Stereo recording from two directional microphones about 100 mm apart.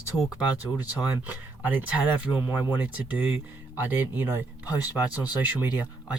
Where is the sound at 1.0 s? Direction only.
15° right (ahead or behind).